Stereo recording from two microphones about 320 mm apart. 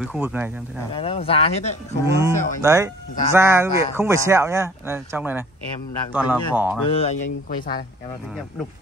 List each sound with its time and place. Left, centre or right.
0.0 s speech: centre
0.9 s speech: centre
2.1 s speech: centre
6.9 s speech: centre